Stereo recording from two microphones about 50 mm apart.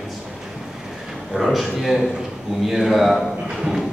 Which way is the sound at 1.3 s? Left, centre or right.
Centre.